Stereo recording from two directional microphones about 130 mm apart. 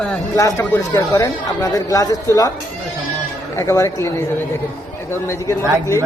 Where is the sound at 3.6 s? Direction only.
20° left (ahead or behind).